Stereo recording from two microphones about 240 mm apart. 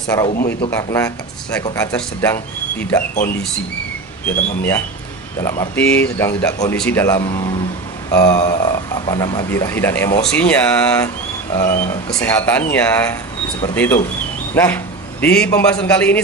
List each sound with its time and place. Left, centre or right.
0.3 s speech: left
0.7 s speech: centre
5.4 s a man's voice: centre